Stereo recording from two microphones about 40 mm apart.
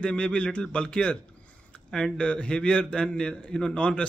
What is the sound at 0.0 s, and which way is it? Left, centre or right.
A man's voice, left.